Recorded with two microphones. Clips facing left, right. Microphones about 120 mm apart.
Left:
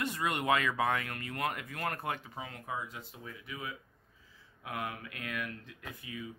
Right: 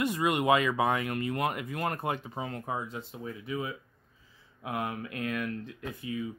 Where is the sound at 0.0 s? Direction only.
15° right (ahead or behind).